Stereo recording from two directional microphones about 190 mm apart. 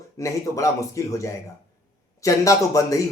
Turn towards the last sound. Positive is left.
turn(degrees=15)  # may be behind; listen again after turning